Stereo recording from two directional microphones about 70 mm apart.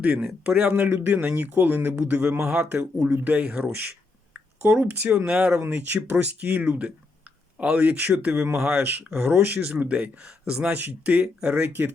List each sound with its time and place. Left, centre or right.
0.0 s speech: right
2.4 s a man's voice: centre
4.6 s speech: right; by 5.6 s centre
5.6 s speech: right